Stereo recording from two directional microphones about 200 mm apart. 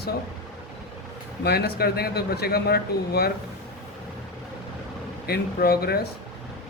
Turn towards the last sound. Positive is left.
turn(degrees=50)  # may be behind; listen again after turning